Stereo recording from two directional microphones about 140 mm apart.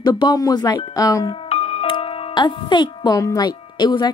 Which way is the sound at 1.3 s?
45° left (ahead or behind).